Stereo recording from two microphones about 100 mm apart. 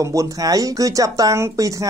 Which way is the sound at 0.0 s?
35° right (ahead or behind).